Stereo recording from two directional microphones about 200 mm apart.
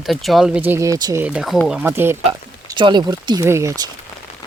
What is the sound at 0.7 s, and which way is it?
Speech, 15° right (ahead or behind).